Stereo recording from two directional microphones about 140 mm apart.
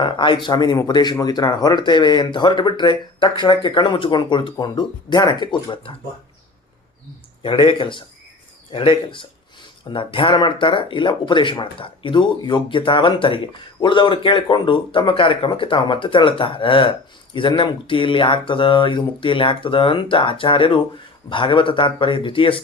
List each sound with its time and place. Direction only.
0.0 s speech: 35° left (ahead or behind)
7.4 s speech: 40° left (ahead or behind)